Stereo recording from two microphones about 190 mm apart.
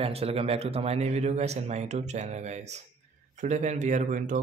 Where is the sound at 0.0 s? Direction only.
30° right (ahead or behind).